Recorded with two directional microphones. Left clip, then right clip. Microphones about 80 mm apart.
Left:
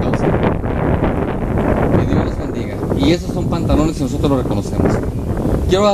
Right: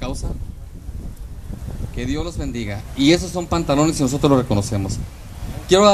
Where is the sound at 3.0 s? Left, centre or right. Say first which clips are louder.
Right 2 dB; right.